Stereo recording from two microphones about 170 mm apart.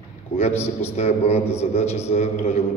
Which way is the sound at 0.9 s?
40° left (ahead or behind).